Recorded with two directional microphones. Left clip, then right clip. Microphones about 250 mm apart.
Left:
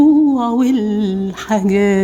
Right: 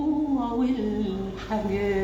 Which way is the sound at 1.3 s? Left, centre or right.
Left.